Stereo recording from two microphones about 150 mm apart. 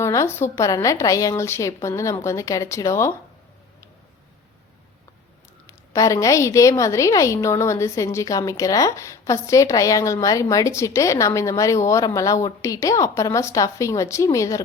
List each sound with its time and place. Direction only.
0.0 s a woman's voice: 20° left (ahead or behind)
5.6 s a woman's voice: 20° left (ahead or behind)